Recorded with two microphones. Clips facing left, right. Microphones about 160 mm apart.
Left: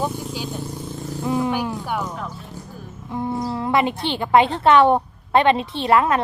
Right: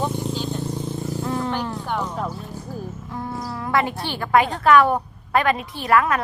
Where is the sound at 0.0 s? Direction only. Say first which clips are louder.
Right 1 dB; 10° left (ahead or behind).